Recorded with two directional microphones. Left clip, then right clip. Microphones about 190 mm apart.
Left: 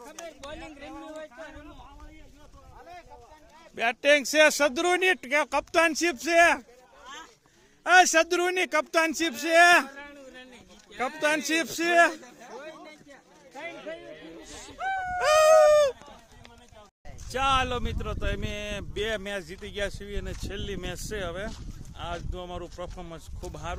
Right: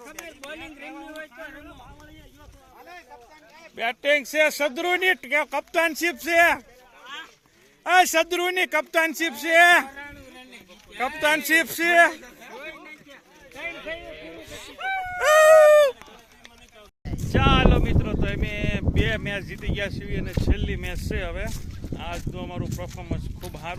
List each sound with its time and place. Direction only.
0.9 s speech: centre (ahead or behind)
3.8 s speech: 25° left (ahead or behind)
7.9 s speech: 15° left (ahead or behind)
10.9 s speech: 10° left (ahead or behind)
12.5 s a sound: 5° right (ahead or behind)
15.2 s a sound: 5° left (ahead or behind)
17.3 s speech: 15° left (ahead or behind)